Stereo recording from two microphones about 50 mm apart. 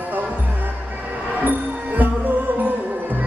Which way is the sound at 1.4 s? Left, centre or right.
Right.